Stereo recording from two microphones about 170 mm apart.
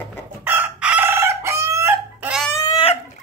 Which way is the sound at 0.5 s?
10° right (ahead or behind).